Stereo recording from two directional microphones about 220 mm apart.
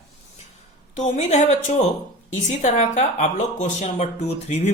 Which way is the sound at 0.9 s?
35° left (ahead or behind).